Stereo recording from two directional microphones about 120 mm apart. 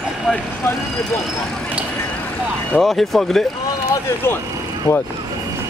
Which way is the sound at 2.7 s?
Centre (ahead or behind).